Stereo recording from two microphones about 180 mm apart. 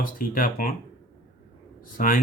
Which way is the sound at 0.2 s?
50° left (ahead or behind).